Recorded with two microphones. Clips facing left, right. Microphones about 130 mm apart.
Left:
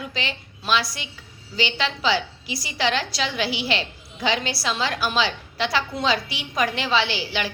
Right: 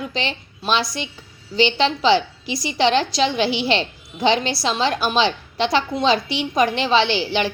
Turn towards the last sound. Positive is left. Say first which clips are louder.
# right 6 dB
turn(degrees=-25)  # may be behind; listen again after turning